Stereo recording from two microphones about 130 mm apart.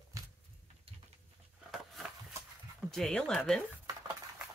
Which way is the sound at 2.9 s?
5° left (ahead or behind).